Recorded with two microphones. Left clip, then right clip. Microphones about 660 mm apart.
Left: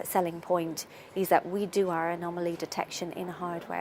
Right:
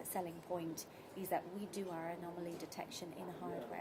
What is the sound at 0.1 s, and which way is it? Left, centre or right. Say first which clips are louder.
A woman's voice: left 15 dB; left.